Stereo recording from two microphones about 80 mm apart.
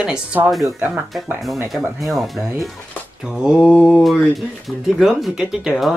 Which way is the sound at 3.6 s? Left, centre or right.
Centre.